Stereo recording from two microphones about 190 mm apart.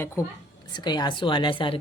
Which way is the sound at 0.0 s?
10° left (ahead or behind).